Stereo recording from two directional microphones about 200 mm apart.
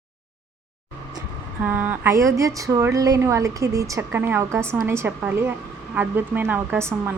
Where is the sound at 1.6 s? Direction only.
10° right (ahead or behind).